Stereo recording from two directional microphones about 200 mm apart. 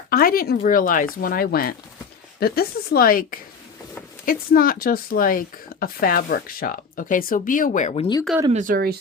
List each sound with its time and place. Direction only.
0.1 s speech: 50° left (ahead or behind); by 8.2 s 25° left (ahead or behind)
8.4 s speech: 40° right (ahead or behind)